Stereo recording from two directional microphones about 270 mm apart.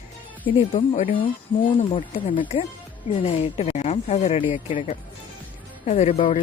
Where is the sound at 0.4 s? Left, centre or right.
Centre.